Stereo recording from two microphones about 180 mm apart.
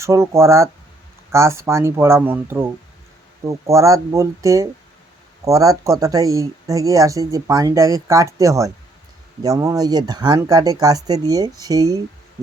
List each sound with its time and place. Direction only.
0.0 s speech: 15° right (ahead or behind)